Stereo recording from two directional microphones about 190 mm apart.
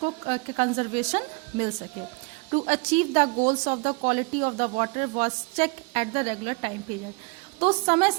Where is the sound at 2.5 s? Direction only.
35° right (ahead or behind).